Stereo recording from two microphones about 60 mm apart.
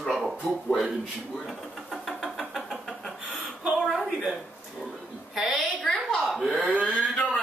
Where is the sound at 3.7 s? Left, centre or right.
Centre.